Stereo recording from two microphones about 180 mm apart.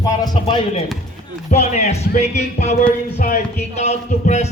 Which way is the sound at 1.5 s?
40° left (ahead or behind).